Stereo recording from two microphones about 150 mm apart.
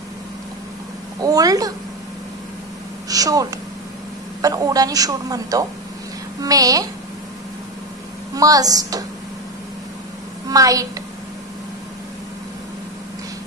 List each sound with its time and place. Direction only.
1.2 s a woman's voice: 25° right (ahead or behind)
3.1 s a woman's voice: 25° right (ahead or behind)
8.4 s a woman's voice: 25° right (ahead or behind)
10.5 s a woman's voice: 25° right (ahead or behind)